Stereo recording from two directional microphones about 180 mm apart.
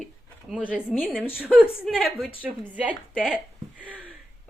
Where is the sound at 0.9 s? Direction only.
5° right (ahead or behind).